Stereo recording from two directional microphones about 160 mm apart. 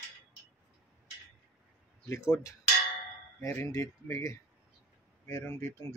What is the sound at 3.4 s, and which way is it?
Speech, 20° left (ahead or behind).